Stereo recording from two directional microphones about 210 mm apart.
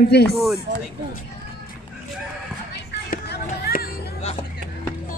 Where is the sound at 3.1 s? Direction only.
45° left (ahead or behind).